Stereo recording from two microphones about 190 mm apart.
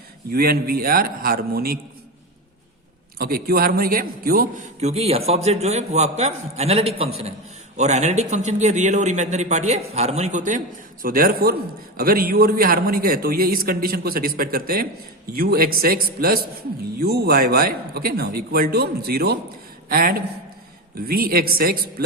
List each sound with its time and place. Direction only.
0.3 s a man's voice: 55° right (ahead or behind)
3.2 s a man's voice: 55° right (ahead or behind)
4.8 s a man's voice: 35° right (ahead or behind); by 22.0 s 50° right (ahead or behind)